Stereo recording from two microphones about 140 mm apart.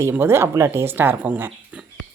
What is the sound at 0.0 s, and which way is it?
A woman's voice, 15° right (ahead or behind).